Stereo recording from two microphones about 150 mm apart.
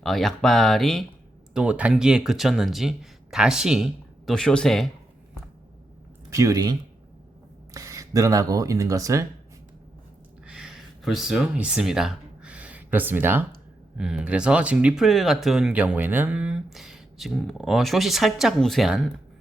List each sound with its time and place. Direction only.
0.0 s speech: centre (ahead or behind)
1.5 s speech: 10° right (ahead or behind)
6.3 s speech: 20° right (ahead or behind)
10.4 s a sound: 5° right (ahead or behind)
13.9 s speech: 5° right (ahead or behind)